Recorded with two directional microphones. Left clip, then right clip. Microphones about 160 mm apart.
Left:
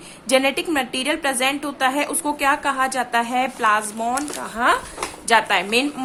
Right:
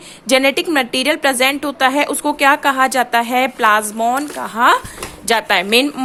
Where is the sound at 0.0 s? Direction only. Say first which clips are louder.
Right 5 dB; 45° right (ahead or behind).